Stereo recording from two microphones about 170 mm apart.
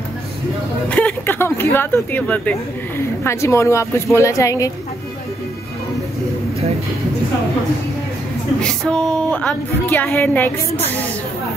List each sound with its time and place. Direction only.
0.8 s a woman's voice: 10° left (ahead or behind)
8.5 s a woman's voice: 5° left (ahead or behind)